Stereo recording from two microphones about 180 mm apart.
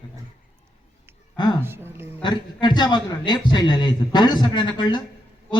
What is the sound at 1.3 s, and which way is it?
Speech, 25° left (ahead or behind).